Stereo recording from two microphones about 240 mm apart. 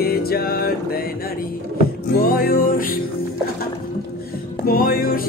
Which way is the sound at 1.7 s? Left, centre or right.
Left.